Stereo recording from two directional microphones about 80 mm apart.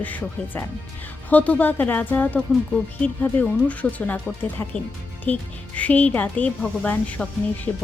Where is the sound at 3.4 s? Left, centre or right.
Centre.